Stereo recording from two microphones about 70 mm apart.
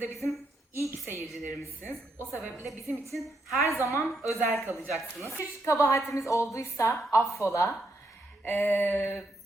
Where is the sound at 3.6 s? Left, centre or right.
Left.